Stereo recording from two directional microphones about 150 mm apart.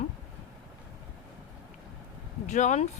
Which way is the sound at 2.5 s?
55° left (ahead or behind).